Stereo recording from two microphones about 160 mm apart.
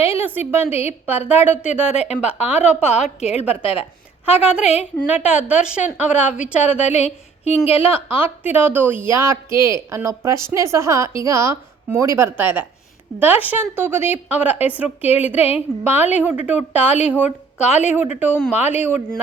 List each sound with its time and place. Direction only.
0.2 s a woman's voice: 10° right (ahead or behind)
0.7 s a woman's voice: 40° left (ahead or behind)
1.0 s a woman's voice: 10° right (ahead or behind)
3.0 s a woman's voice: 40° left (ahead or behind)
4.3 s a woman's voice: 10° right (ahead or behind)
6.9 s speech: 40° left (ahead or behind)
7.7 s a woman's voice: 10° right (ahead or behind)